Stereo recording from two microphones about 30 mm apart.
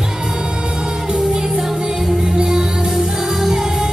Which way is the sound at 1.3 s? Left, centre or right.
Right.